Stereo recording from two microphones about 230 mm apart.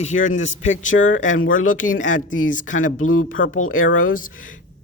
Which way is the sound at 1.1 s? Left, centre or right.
Left.